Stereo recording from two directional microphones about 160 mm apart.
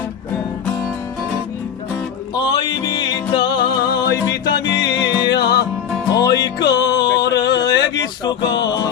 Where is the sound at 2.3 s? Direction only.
30° left (ahead or behind).